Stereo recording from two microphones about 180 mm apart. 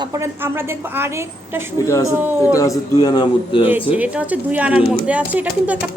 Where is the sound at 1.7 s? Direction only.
15° left (ahead or behind).